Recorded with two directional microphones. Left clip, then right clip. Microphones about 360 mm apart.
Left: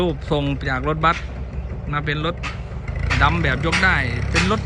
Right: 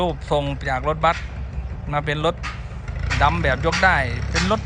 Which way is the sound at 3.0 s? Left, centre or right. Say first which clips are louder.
Left 2 dB; centre.